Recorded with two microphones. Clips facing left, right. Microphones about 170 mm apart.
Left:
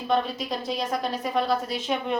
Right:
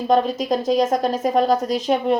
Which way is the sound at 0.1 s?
45° right (ahead or behind).